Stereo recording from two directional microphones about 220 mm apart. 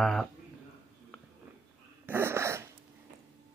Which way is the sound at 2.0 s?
10° right (ahead or behind).